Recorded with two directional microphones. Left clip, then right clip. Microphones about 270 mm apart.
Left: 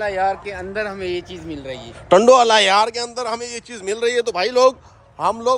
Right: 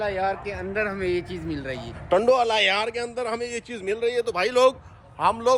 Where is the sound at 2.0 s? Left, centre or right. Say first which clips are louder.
Left 8 dB; left.